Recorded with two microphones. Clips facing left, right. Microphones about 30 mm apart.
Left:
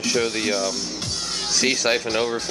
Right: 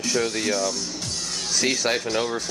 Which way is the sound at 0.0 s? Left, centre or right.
Centre.